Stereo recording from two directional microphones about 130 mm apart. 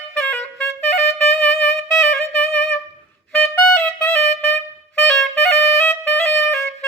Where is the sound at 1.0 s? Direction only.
60° left (ahead or behind).